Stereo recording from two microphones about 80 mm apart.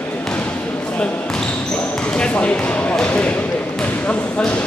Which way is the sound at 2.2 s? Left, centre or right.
Centre.